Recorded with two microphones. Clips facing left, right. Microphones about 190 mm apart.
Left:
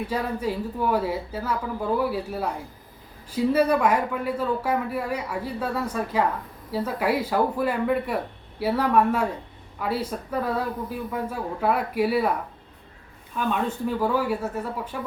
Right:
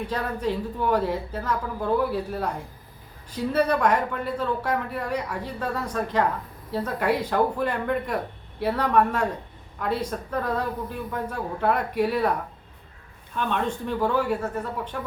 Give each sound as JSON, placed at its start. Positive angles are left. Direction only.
{"t": 0.1, "sound": "speech", "side_deg": 10}
{"t": 13.3, "sound": "speech", "side_deg": 5}